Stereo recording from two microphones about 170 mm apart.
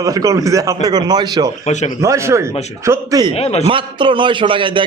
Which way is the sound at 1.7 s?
40° left (ahead or behind).